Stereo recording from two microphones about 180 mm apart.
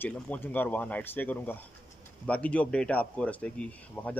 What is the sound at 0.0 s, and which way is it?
Speech, 10° left (ahead or behind).